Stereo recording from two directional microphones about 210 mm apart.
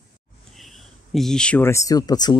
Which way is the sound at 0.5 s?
Centre (ahead or behind).